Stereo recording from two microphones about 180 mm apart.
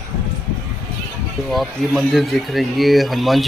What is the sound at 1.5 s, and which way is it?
Speech, centre (ahead or behind).